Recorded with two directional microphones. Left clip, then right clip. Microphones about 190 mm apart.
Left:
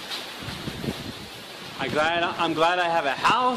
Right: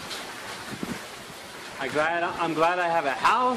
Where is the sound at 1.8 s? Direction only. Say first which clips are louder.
Left 2 dB; 10° left (ahead or behind).